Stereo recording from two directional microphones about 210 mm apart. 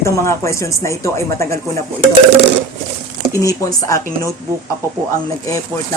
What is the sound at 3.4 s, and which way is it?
Speech, 15° left (ahead or behind).